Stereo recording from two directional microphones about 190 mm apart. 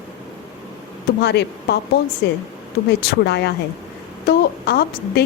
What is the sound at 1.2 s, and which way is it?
Speech, 60° left (ahead or behind).